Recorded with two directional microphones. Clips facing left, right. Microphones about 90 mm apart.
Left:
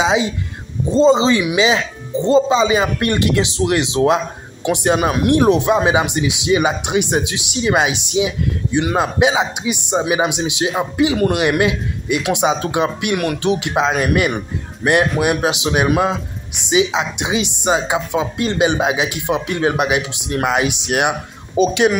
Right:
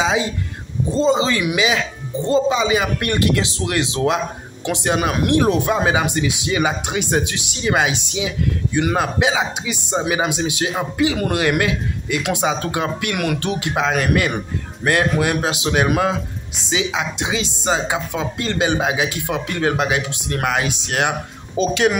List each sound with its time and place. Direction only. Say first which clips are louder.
0.0 s speech: left 3 dB; 20° left (ahead or behind)
5.9 s speech: left 2 dB; 15° left (ahead or behind)
13.1 s speech: left 3 dB; centre (ahead or behind)
13.4 s speech: left 4 dB; 20° left (ahead or behind)